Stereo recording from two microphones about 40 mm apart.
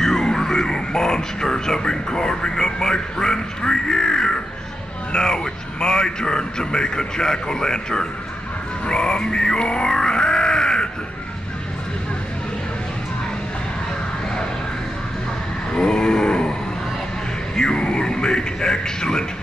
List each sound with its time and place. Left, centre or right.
0.0 s music: centre
5.1 s speech: centre
8.8 s grunt: centre
15.7 s a sound: centre
17.6 s music: centre